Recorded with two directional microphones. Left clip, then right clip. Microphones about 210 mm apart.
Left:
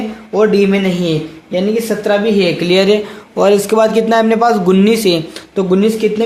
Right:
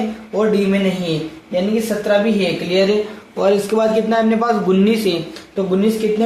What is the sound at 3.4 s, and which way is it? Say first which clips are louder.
A man's voice: left 5 dB; 40° left (ahead or behind).